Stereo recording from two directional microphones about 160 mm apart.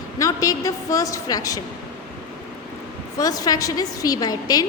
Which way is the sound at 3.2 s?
25° left (ahead or behind).